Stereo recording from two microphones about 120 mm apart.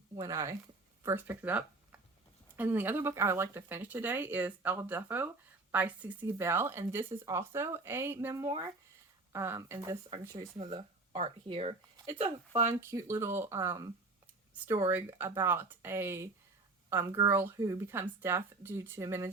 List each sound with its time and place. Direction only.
0.2 s speech: 25° right (ahead or behind)
8.4 s speech: 35° right (ahead or behind)
9.3 s speech: 20° right (ahead or behind)
10.7 s a sound: 45° right (ahead or behind)
11.4 s speech: 50° right (ahead or behind)
12.6 s speech: 25° right (ahead or behind)